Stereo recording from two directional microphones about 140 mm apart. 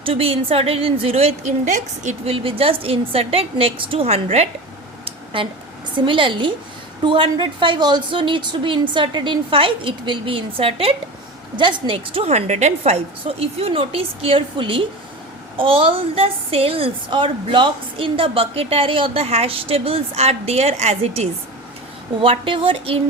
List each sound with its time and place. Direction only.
0.0 s a woman's voice: 40° right (ahead or behind); by 2.3 s 55° right (ahead or behind)
2.3 s a woman's voice: 40° right (ahead or behind)
5.0 s a sound: 40° right (ahead or behind)
6.1 s a woman's voice: 35° right (ahead or behind)